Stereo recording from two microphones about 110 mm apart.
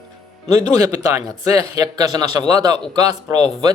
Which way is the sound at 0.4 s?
35° right (ahead or behind).